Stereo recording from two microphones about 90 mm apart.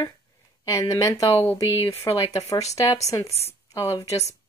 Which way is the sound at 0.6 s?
35° left (ahead or behind).